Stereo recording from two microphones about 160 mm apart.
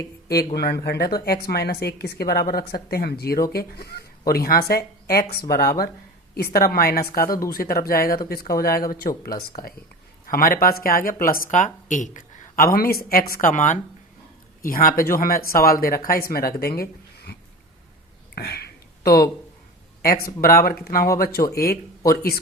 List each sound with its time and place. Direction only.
0.5 s speech: 90° left
4.3 s speech: 70° left (ahead or behind)
18.3 s a sound: 80° left
20.0 s speech: 70° left (ahead or behind)